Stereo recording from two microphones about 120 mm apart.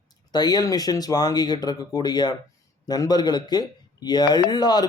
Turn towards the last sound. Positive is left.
turn(degrees=35)  # may be behind; listen again after turning